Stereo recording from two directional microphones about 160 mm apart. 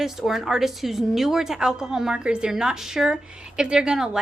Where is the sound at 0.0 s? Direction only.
Centre (ahead or behind).